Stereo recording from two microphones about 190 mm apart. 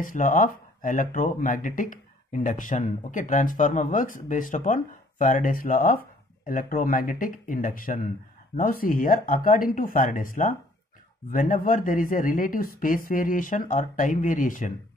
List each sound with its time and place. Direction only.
0.0 s speech: 45° left (ahead or behind)